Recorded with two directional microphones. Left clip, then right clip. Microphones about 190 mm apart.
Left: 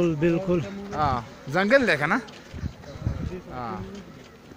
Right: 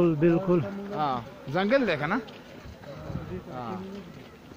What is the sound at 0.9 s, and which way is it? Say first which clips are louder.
Speech: left 4 dB; 45° left (ahead or behind).